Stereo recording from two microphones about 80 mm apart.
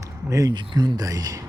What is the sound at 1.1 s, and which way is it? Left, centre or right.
Speech, right.